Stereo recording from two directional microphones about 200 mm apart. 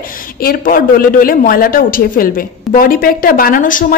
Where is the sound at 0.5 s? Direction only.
45° left (ahead or behind).